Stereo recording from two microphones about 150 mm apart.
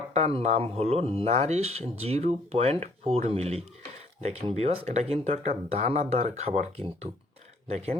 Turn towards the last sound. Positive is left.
turn(degrees=-45)  # may be behind; listen again after turning